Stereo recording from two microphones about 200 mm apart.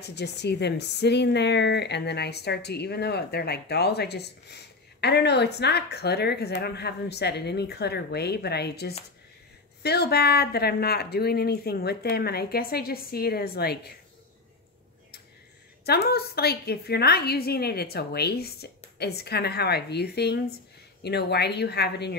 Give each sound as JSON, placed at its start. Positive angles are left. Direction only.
{"t": 0.0, "sound": "a woman's voice", "side_deg": 55}
{"t": 15.8, "sound": "a woman's voice", "side_deg": 55}